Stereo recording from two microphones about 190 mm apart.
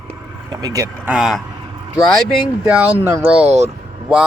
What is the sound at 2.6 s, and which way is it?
Speech, 10° right (ahead or behind).